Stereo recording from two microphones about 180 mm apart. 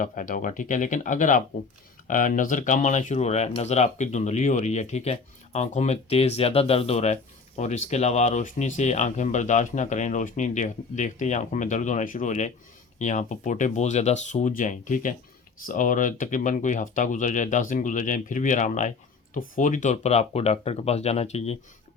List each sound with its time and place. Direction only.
0.0 s speech: 45° left (ahead or behind)